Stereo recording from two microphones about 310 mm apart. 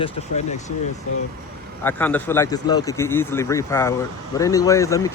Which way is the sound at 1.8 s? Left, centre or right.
Centre.